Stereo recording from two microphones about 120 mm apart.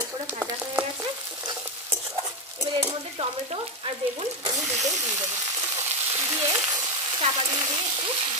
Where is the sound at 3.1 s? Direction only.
50° right (ahead or behind).